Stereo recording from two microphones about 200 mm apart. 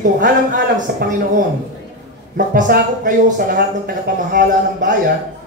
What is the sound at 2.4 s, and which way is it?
Speech, 45° right (ahead or behind).